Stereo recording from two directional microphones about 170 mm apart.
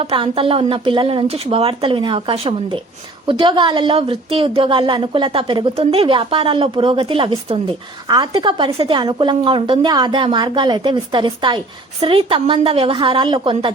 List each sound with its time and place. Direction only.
0.0 s a woman's voice: 35° right (ahead or behind)